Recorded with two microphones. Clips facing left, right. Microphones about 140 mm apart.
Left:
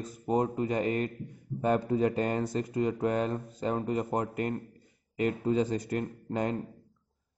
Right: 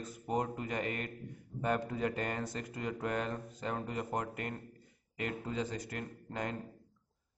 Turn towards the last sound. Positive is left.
turn(degrees=30)  # may be behind; listen again after turning